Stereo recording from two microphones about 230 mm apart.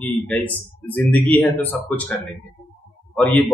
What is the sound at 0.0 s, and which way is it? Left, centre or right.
Speech, centre.